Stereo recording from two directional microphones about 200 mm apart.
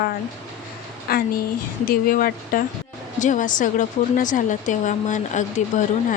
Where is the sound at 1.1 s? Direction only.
50° left (ahead or behind).